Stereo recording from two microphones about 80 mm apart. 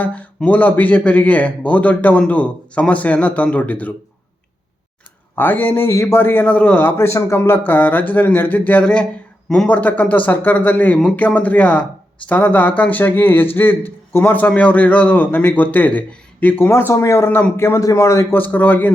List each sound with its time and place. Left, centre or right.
0.0 s a man's voice: centre
5.3 s a man's voice: left
16.9 s a man's voice: left